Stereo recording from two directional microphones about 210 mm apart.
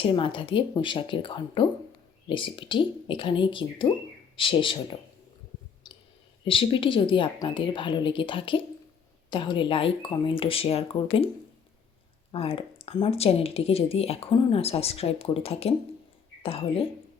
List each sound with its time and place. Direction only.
0.0 s speech: 25° left (ahead or behind)
6.4 s speech: 25° left (ahead or behind)
12.3 s speech: 25° left (ahead or behind)